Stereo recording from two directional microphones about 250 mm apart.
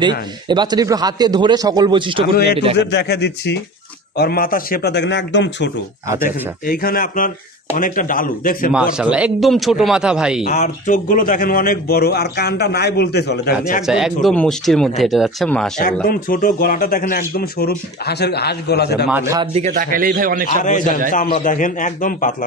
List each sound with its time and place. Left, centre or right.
0.5 s a man's voice: centre
2.8 s a man's voice: left
8.7 s speech: centre
10.5 s a man's voice: left
13.8 s speech: centre
15.8 s a man's voice: left
19.0 s a man's voice: centre; by 20.4 s right
20.5 s a man's voice: left